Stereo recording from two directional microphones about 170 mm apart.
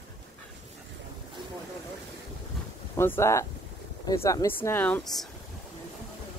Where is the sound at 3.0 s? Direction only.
15° left (ahead or behind).